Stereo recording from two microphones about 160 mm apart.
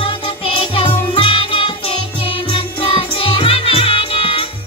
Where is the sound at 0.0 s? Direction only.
35° left (ahead or behind).